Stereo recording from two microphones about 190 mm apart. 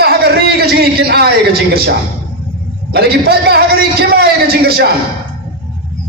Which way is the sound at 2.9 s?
55° right (ahead or behind).